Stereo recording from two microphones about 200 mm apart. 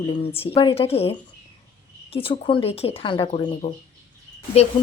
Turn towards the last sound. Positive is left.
turn(degrees=30)  # may be behind; listen again after turning